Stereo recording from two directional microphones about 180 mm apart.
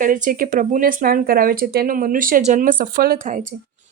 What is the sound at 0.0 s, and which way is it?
Speech, 50° right (ahead or behind).